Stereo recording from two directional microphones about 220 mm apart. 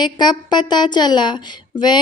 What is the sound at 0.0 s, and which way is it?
A woman's voice, 20° left (ahead or behind).